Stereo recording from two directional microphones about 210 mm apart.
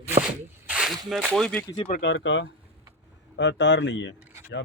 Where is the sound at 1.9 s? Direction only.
45° left (ahead or behind).